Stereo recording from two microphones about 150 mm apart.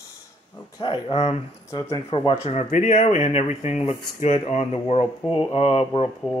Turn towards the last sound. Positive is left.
turn(degrees=-5)  # may be behind; listen again after turning